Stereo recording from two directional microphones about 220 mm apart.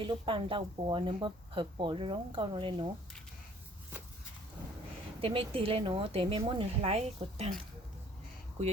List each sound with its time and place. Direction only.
0.0 s a woman's voice: 20° right (ahead or behind)
5.2 s a woman's voice: 25° right (ahead or behind)